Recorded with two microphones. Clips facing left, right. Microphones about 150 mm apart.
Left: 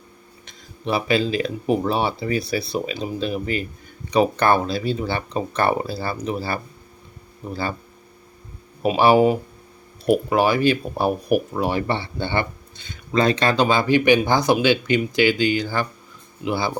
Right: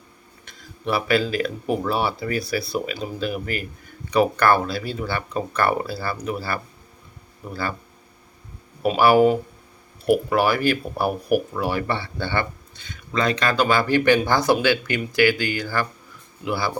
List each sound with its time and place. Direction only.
0.4 s speech: 20° left (ahead or behind)
8.8 s speech: 20° left (ahead or behind)